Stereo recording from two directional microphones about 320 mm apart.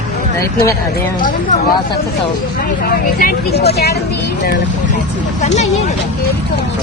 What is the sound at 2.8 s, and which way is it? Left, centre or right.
Speech, left.